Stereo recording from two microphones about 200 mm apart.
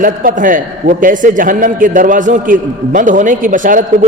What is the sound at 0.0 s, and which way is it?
A man's voice, 45° right (ahead or behind).